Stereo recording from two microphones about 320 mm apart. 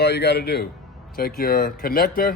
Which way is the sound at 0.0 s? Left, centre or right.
Left.